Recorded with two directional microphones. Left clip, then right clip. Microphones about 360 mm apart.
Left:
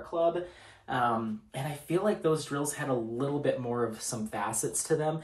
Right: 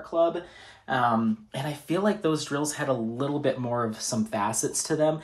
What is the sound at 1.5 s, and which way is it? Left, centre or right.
Speech, right.